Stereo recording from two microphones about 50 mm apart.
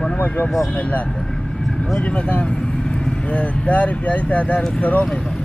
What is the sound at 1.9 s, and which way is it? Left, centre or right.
Speech, left.